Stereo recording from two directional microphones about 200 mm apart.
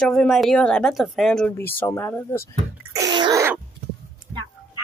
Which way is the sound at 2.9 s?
20° right (ahead or behind).